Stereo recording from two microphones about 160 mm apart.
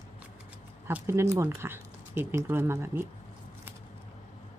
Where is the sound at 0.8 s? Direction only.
15° right (ahead or behind).